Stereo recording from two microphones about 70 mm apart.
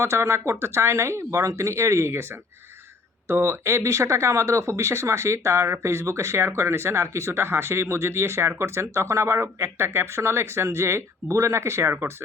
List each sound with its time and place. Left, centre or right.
0.0 s speech: right
3.2 s speech: right